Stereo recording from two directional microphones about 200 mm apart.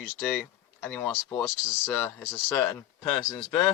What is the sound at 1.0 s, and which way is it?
Speech, 15° left (ahead or behind).